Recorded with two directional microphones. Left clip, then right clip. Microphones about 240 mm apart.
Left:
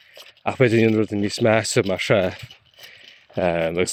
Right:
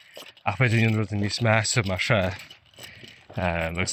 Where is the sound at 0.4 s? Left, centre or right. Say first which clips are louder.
Left 7 dB; left.